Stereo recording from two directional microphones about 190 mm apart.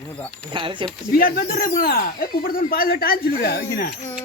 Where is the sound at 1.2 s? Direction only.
50° left (ahead or behind).